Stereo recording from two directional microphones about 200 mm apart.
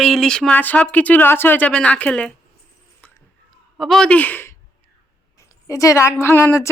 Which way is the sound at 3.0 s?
10° left (ahead or behind).